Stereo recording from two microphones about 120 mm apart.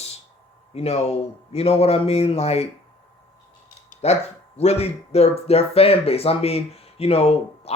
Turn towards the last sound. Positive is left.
turn(degrees=55)  # may be behind; listen again after turning